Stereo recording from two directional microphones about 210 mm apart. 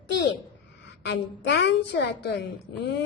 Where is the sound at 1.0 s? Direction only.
55° left (ahead or behind).